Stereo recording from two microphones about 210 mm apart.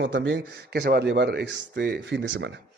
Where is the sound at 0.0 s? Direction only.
60° right (ahead or behind).